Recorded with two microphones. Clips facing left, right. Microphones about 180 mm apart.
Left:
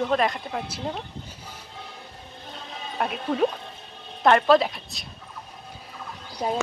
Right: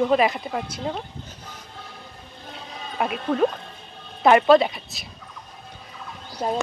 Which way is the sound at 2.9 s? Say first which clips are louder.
Right 2 dB; centre (ahead or behind).